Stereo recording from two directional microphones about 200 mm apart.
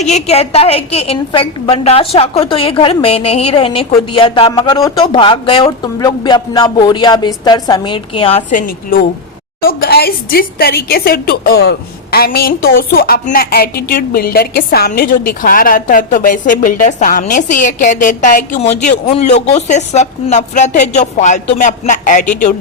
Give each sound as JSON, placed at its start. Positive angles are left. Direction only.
{"t": 0.0, "sound": "a woman's voice", "side_deg": 35}